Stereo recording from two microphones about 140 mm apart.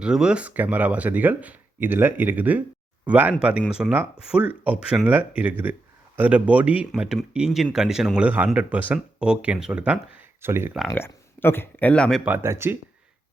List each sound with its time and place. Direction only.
0.0 s speech: 5° right (ahead or behind)
10.9 s speech: 15° left (ahead or behind)
12.2 s speech: 15° right (ahead or behind)